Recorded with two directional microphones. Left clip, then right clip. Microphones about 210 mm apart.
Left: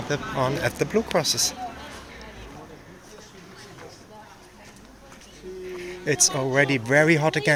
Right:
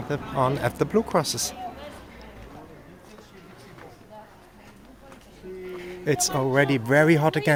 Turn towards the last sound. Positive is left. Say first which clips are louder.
# even
turn(degrees=-20)  # may be behind; listen again after turning